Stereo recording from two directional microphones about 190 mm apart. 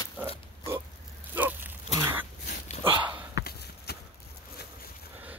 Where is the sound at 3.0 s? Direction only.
10° right (ahead or behind).